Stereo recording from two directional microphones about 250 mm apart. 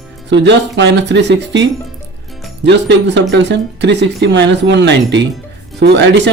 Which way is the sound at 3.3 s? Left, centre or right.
Right.